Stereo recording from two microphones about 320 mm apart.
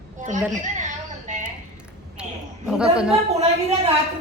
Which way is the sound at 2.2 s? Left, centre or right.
Centre.